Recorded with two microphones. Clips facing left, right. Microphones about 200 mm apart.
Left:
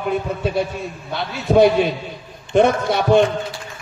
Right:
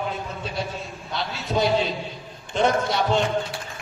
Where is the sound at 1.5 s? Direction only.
60° left (ahead or behind).